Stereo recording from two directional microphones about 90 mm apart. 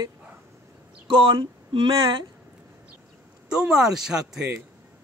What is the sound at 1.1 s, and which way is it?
Speech, 65° right (ahead or behind).